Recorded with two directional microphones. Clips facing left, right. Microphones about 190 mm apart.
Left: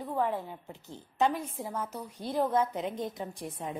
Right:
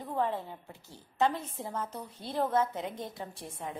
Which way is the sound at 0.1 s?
15° left (ahead or behind).